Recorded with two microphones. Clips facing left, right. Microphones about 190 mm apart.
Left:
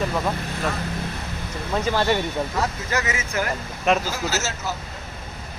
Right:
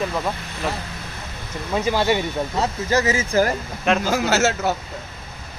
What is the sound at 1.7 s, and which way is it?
Speech, 10° right (ahead or behind).